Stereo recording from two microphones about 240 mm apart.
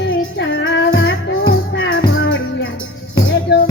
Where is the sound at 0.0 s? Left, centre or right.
Left.